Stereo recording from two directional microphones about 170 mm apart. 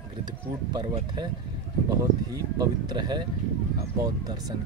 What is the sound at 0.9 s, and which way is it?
Speech, 25° right (ahead or behind).